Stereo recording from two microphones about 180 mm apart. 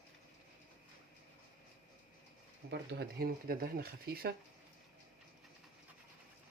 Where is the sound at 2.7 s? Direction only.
65° right (ahead or behind).